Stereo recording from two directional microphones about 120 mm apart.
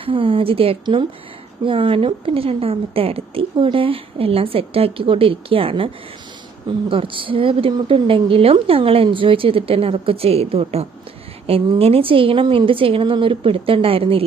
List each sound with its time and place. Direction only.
0.0 s a woman's voice: 50° right (ahead or behind)